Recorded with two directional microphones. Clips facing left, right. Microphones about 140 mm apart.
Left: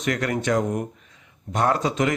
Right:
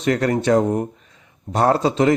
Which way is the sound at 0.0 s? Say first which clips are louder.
Right 6 dB; 35° right (ahead or behind).